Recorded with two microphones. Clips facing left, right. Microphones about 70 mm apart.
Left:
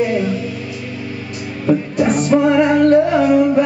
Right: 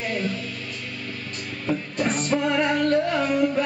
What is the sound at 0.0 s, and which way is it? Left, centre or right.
Music, centre.